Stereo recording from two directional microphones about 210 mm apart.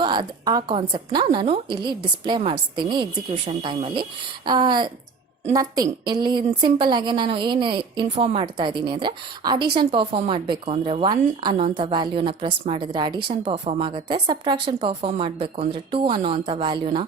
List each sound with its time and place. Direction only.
0.0 s a woman's voice: 20° right (ahead or behind)